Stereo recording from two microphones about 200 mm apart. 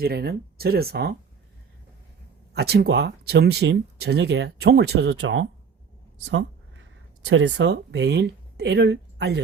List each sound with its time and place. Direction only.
0.0 s speech: 50° right (ahead or behind)
2.5 s speech: 55° right (ahead or behind)
6.2 s a sound: 70° right (ahead or behind)
7.3 s speech: 70° right (ahead or behind)